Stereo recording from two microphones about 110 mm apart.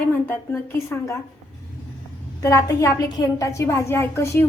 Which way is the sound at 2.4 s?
30° left (ahead or behind).